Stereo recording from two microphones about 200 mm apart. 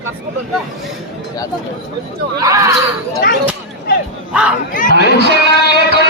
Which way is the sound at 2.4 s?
15° right (ahead or behind).